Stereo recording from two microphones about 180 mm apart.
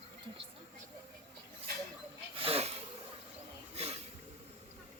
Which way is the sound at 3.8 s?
35° right (ahead or behind).